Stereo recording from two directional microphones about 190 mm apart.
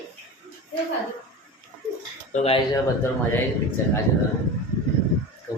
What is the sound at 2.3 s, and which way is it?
Speech, 35° left (ahead or behind).